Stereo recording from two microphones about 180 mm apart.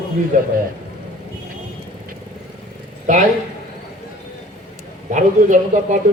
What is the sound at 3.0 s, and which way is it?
Speech, 45° right (ahead or behind).